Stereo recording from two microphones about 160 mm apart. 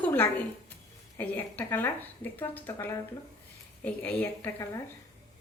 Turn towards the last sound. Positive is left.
turn(degrees=15)  # may be behind; listen again after turning